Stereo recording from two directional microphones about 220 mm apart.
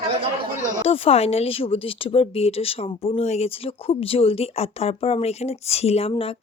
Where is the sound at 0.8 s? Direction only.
25° left (ahead or behind).